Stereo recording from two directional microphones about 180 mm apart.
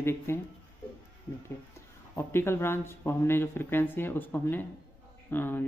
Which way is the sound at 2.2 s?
15° left (ahead or behind).